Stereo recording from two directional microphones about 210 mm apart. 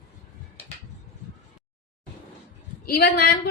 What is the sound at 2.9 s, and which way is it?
Speech, 45° left (ahead or behind).